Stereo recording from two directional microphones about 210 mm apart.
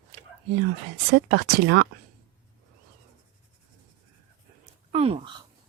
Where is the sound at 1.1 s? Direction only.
50° right (ahead or behind).